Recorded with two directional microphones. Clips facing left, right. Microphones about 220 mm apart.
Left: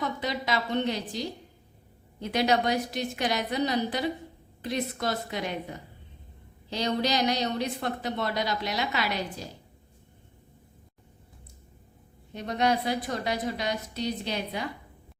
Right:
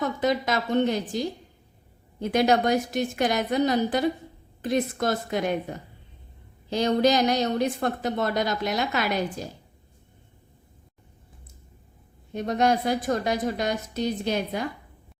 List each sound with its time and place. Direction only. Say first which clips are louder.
0.2 s speech: right 5 dB; 50° right (ahead or behind)
6.7 s speech: right 7 dB; 50° right (ahead or behind)
12.3 s speech: right 4 dB; 45° right (ahead or behind)